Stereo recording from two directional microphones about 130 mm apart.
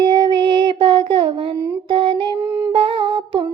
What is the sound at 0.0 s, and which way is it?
Child singing, 35° right (ahead or behind).